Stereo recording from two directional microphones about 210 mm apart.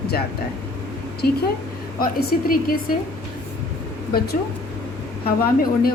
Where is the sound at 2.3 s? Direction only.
45° left (ahead or behind).